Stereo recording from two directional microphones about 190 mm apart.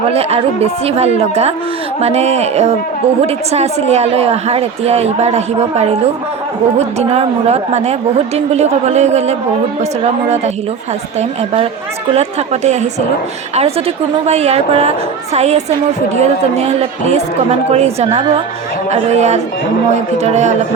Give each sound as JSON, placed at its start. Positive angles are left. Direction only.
{"t": 0.1, "sound": "speech", "side_deg": -30}